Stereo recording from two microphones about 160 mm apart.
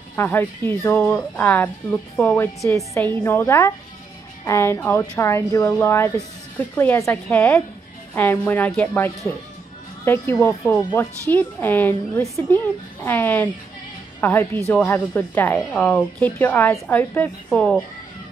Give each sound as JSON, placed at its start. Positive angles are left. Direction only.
{"t": 0.1, "sound": "speech", "side_deg": 15}